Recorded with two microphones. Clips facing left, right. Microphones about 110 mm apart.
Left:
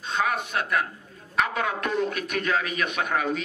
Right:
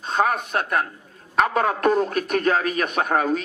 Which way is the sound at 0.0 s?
40° right (ahead or behind).